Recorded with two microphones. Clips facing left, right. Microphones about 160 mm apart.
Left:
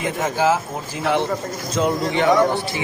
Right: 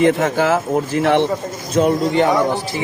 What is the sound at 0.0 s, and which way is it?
Speech, 70° right (ahead or behind).